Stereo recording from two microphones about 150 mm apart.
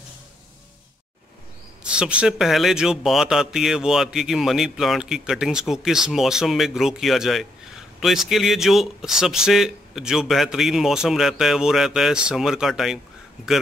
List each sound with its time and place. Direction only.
1.8 s a man's voice: 5° right (ahead or behind)